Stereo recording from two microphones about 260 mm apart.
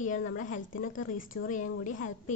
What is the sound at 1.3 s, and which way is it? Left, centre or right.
Speech, left.